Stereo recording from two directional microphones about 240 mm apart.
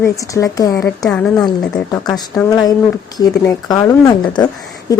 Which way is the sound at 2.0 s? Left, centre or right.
Centre.